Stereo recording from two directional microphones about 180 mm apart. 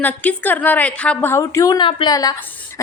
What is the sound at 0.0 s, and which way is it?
A woman's voice, 10° left (ahead or behind).